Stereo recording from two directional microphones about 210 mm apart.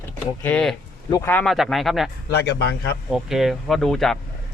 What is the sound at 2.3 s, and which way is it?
Speech, 50° left (ahead or behind).